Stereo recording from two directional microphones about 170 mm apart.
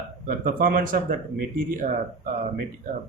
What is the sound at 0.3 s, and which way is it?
Speech, 55° right (ahead or behind).